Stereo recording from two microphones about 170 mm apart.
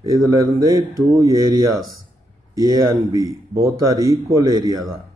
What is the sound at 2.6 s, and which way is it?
Speech, 20° right (ahead or behind).